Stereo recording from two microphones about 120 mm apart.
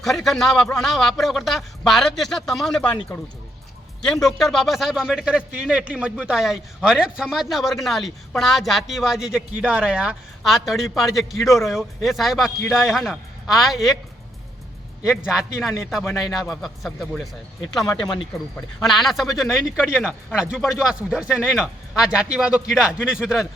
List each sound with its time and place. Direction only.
0.0 s speech: centre (ahead or behind)
4.0 s speech: 5° left (ahead or behind)
15.0 s speech: 5° right (ahead or behind)
17.8 s speech: 30° left (ahead or behind)
18.8 s speech: centre (ahead or behind)